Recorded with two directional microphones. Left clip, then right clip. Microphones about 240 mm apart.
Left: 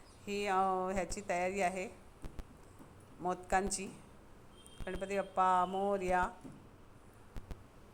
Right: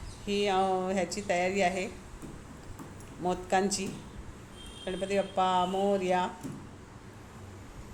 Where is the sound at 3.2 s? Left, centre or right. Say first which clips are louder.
Right 6 dB; centre.